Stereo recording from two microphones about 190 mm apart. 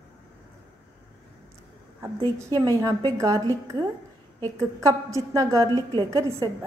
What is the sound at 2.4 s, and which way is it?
A woman's voice, 20° right (ahead or behind).